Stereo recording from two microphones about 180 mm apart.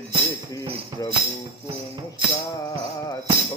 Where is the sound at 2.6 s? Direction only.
20° left (ahead or behind).